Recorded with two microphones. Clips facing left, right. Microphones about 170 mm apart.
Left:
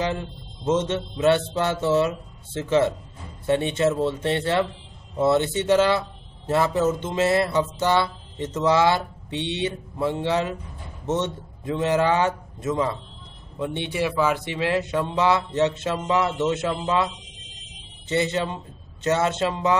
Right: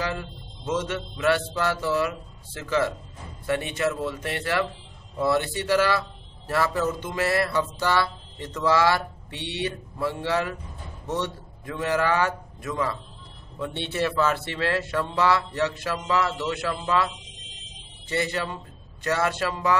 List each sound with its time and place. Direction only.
0.0 s speech: 25° left (ahead or behind)